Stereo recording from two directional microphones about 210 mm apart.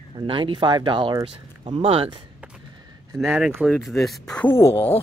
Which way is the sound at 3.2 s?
Centre (ahead or behind).